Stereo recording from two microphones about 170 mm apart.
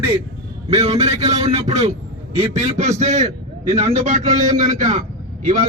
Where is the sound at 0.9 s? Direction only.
40° right (ahead or behind).